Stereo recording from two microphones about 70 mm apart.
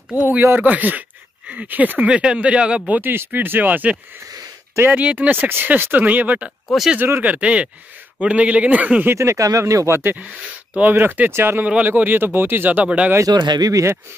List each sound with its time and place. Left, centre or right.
0.1 s speech: right
2.9 s speech: right
9.1 s speech: right
10.8 s speech: right
11.6 s speech: right
13.3 s speech: right
13.7 s speech: right